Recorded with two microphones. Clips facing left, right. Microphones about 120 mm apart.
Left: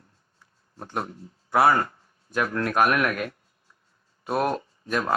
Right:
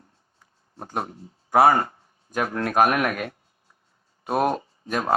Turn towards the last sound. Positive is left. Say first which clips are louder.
# right 2 dB
turn(degrees=-40)  # may be behind; listen again after turning